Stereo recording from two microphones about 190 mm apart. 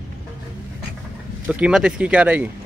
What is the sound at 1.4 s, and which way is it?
Speech, 5° right (ahead or behind).